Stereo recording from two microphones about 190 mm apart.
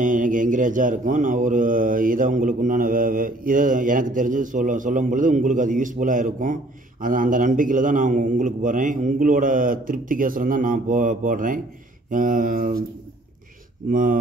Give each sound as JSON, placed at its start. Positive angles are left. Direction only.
{"t": 0.0, "sound": "mantra", "side_deg": -45}
{"t": 13.8, "sound": "mantra", "side_deg": -45}